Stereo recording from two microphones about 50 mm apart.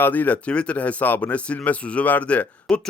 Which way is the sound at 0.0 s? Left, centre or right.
Left.